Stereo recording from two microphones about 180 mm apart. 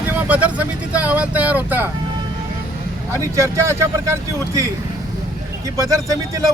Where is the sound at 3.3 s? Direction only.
15° right (ahead or behind).